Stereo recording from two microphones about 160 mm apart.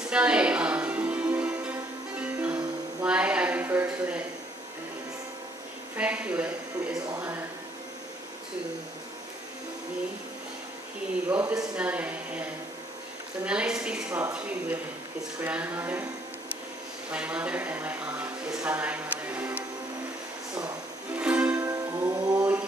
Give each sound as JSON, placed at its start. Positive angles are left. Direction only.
{"t": 0.1, "sound": "music", "side_deg": -5}
{"t": 5.9, "sound": "speech", "side_deg": -5}
{"t": 11.2, "sound": "speech", "side_deg": -10}
{"t": 13.5, "sound": "a woman's voice", "side_deg": -5}
{"t": 15.4, "sound": "speech", "side_deg": -10}
{"t": 17.1, "sound": "a sound", "side_deg": -10}
{"t": 21.2, "sound": "music", "side_deg": -5}
{"t": 21.5, "sound": "music", "side_deg": -20}